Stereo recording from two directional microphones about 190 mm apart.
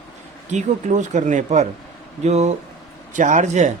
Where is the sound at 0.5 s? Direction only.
40° right (ahead or behind).